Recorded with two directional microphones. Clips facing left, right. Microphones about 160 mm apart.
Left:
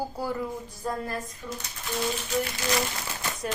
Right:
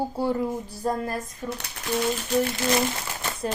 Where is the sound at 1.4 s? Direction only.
45° right (ahead or behind).